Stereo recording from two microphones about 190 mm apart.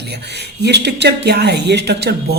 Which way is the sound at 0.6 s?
60° right (ahead or behind).